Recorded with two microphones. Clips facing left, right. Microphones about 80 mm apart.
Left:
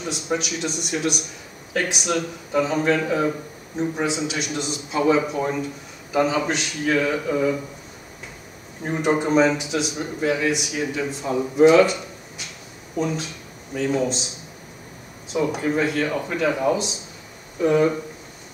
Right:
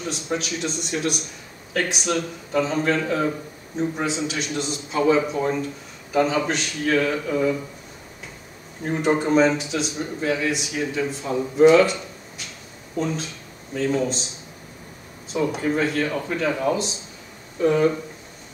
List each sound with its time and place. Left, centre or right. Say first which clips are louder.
0.0 s a man's voice: left 1 dB; centre
8.8 s a man's voice: even; centre
15.3 s a man's voice: left 1 dB; centre